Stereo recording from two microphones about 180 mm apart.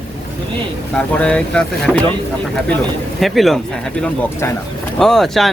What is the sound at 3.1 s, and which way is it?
Speech, centre (ahead or behind).